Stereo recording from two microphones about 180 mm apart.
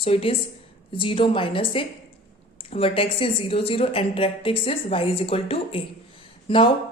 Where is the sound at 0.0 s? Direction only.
30° left (ahead or behind).